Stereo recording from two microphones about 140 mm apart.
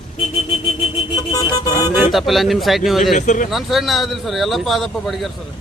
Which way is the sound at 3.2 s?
65° left (ahead or behind).